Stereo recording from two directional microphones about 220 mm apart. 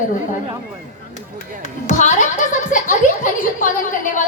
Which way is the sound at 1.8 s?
35° left (ahead or behind).